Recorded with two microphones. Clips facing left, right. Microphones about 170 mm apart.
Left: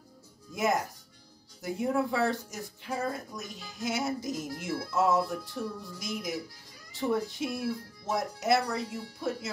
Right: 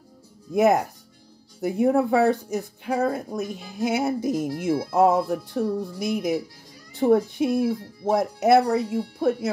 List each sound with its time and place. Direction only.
0.6 s speech: 60° right (ahead or behind)